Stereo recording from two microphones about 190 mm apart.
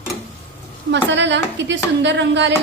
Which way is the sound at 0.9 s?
70° right (ahead or behind).